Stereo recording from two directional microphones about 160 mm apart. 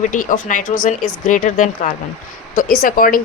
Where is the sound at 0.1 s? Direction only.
55° left (ahead or behind).